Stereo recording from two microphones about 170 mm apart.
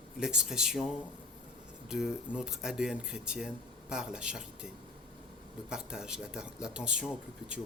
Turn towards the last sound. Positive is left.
turn(degrees=-5)  # may be behind; listen again after turning